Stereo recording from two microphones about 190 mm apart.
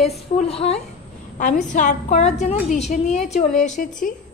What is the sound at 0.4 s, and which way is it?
A woman's voice, 35° left (ahead or behind).